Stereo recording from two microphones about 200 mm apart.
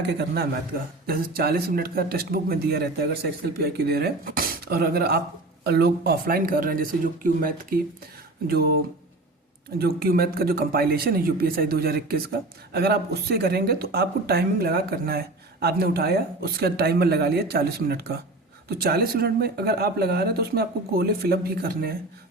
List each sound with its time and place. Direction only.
0.0 s speech: 55° right (ahead or behind)